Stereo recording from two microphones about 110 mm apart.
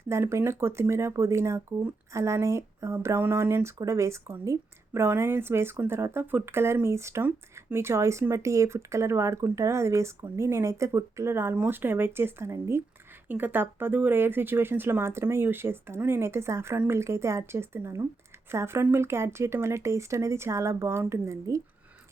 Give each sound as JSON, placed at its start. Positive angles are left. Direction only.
{"t": 0.1, "sound": "speech", "side_deg": -25}